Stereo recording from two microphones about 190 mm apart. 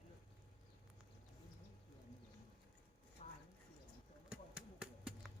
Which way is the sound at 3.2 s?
35° left (ahead or behind).